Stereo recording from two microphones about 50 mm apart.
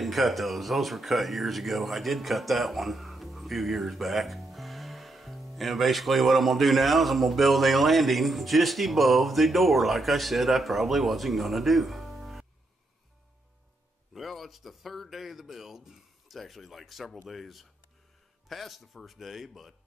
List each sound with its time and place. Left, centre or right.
0.0 s speech: centre
14.1 s speech: centre